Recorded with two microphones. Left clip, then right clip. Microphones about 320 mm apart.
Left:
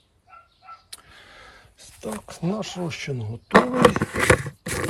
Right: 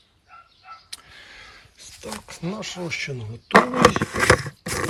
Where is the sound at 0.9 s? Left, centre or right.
Centre.